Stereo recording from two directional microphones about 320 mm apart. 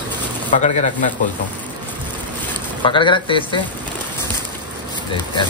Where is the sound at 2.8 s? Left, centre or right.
Centre.